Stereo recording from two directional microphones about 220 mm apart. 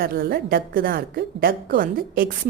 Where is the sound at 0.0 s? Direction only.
40° right (ahead or behind).